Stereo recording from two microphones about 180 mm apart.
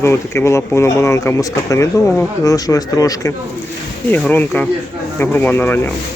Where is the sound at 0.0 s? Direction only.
15° left (ahead or behind).